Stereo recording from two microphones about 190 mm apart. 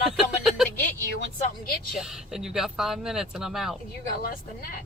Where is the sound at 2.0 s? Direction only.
Centre (ahead or behind).